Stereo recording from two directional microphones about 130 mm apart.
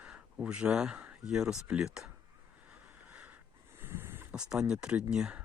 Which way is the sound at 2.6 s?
10° right (ahead or behind).